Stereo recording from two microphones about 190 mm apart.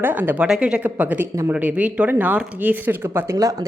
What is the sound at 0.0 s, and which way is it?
Speech, 10° right (ahead or behind).